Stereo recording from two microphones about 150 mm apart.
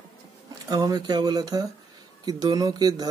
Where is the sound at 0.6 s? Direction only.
25° right (ahead or behind).